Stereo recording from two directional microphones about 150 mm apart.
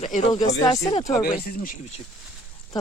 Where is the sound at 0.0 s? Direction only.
50° left (ahead or behind).